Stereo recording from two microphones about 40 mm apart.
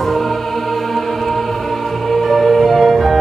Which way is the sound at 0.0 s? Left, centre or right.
Centre.